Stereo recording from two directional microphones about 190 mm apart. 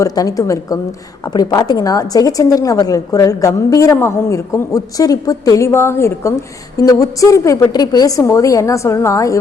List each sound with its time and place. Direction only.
0.0 s a woman's voice: 20° left (ahead or behind)